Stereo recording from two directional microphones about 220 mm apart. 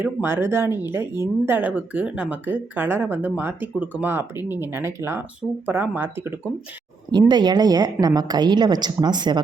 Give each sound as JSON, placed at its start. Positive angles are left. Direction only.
{"t": 0.0, "sound": "a woman's voice", "side_deg": -10}